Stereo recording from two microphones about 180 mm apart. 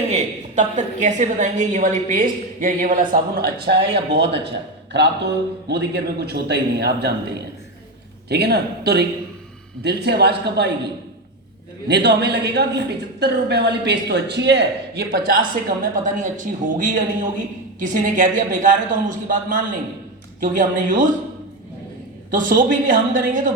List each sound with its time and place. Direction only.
0.1 s a woman's voice: 40° right (ahead or behind); by 10.7 s 65° right (ahead or behind)
11.9 s a woman's voice: 70° right (ahead or behind); by 21.2 s 45° right (ahead or behind)
22.3 s a woman's voice: 50° right (ahead or behind)